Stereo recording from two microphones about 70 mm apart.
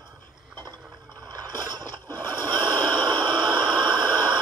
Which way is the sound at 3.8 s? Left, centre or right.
Right.